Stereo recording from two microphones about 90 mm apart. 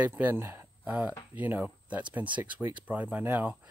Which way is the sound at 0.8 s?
10° right (ahead or behind).